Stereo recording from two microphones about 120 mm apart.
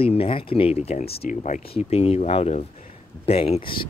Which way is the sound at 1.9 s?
60° left (ahead or behind).